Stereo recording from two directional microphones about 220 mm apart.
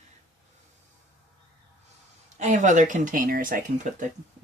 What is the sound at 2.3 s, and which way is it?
Speech, 35° right (ahead or behind).